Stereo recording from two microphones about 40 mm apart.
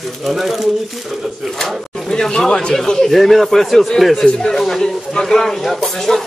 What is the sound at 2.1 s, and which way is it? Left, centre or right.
Speech, centre.